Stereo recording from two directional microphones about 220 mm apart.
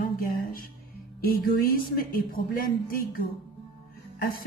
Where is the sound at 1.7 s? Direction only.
40° left (ahead or behind).